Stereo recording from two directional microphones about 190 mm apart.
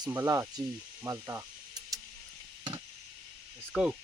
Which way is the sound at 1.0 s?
15° right (ahead or behind).